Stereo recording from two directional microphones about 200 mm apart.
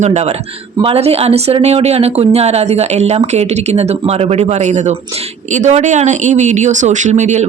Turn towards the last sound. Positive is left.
turn(degrees=-35)  # may be behind; listen again after turning